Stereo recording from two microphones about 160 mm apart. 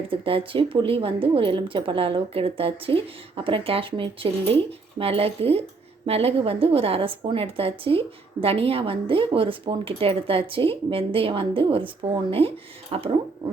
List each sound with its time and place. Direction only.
0.1 s a woman's voice: 35° right (ahead or behind)
12.9 s a woman's voice: 35° right (ahead or behind)